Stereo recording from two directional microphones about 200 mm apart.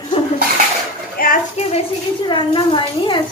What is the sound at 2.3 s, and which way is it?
Speech, 25° left (ahead or behind).